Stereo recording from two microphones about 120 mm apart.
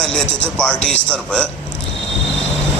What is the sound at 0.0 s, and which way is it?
Speech, 5° left (ahead or behind).